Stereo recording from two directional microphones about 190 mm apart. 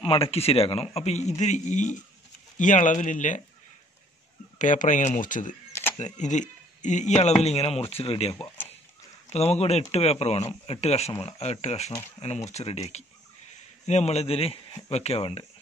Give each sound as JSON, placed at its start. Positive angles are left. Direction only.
{"t": 0.0, "sound": "speech", "side_deg": 30}
{"t": 4.6, "sound": "speech", "side_deg": 40}
{"t": 8.4, "sound": "a sound", "side_deg": 10}
{"t": 9.3, "sound": "speech", "side_deg": 35}